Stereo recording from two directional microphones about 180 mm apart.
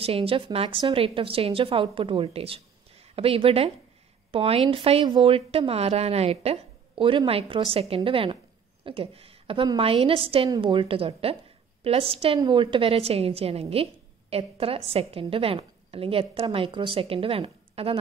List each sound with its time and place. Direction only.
0.0 s speech: 30° right (ahead or behind)